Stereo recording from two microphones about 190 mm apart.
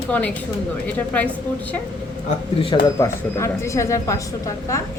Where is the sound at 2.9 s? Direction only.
15° left (ahead or behind).